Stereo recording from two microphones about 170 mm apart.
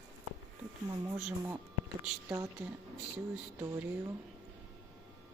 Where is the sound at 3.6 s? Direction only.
20° right (ahead or behind).